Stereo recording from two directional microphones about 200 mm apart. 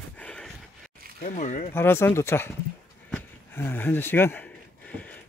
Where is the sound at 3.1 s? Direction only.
10° left (ahead or behind).